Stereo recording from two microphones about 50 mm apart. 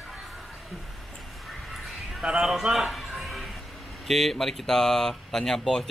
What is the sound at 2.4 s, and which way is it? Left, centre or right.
Speech, centre.